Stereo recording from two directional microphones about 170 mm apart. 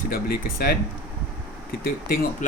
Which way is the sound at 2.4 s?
50° left (ahead or behind).